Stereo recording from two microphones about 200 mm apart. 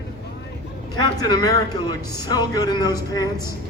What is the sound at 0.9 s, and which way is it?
Speech, 20° left (ahead or behind).